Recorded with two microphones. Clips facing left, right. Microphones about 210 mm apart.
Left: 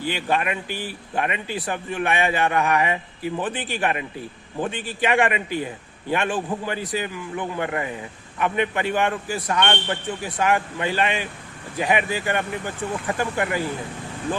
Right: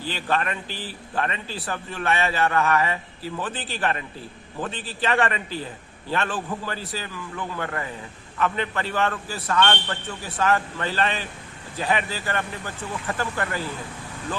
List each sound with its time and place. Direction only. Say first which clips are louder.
0.0 s a man's voice: left 2 dB; 15° left (ahead or behind)